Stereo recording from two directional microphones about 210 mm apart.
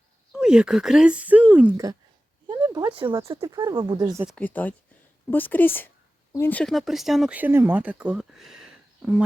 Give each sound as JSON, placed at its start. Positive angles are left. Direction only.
{"t": 0.3, "sound": "speech", "side_deg": -5}
{"t": 3.2, "sound": "speech", "side_deg": -15}
{"t": 4.3, "sound": "a woman's voice", "side_deg": 5}